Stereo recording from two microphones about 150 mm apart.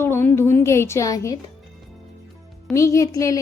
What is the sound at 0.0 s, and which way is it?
A woman's voice, 15° left (ahead or behind).